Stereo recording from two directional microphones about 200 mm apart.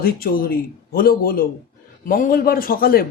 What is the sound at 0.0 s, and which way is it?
A man's voice, 45° left (ahead or behind).